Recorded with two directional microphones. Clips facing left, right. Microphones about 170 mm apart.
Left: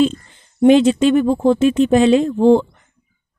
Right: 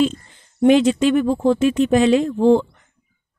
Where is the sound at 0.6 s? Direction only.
25° left (ahead or behind).